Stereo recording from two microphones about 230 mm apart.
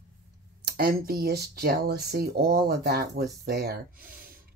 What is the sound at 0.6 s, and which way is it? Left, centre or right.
Speech, right.